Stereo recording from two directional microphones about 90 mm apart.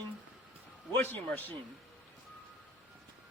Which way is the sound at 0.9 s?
20° left (ahead or behind).